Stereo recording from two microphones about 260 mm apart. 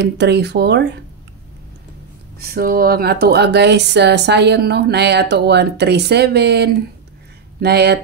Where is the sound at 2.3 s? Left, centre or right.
Right.